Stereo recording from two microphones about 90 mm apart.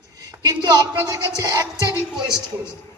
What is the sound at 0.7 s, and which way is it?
A man's voice, 45° right (ahead or behind).